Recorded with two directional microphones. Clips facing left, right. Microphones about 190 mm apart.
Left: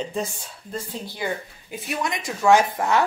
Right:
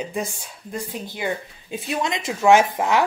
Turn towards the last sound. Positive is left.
turn(degrees=-20)  # may be behind; listen again after turning